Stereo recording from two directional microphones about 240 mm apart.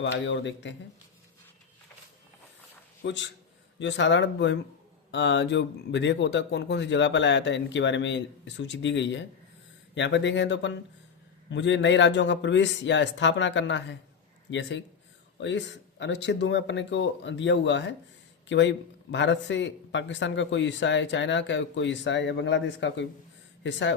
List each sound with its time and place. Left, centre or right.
0.0 s speech: left
3.0 s a man's voice: left